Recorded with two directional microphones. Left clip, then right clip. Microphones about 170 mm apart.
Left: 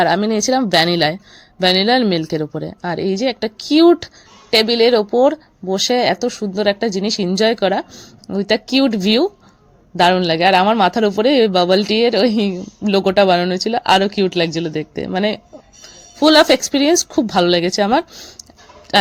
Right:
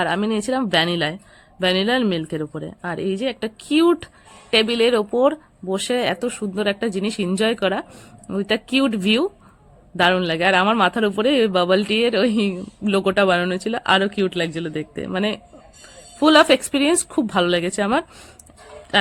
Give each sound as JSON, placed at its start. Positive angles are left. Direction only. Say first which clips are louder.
{"t": 0.0, "sound": "a woman's voice", "louder": "left 6 dB", "side_deg": 25}